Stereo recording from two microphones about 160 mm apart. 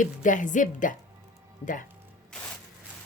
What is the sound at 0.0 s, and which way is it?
Speech, 55° left (ahead or behind).